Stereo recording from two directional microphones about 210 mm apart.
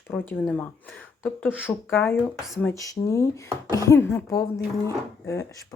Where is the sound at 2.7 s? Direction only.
15° left (ahead or behind).